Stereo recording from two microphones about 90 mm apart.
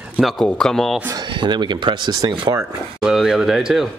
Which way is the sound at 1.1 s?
60° right (ahead or behind).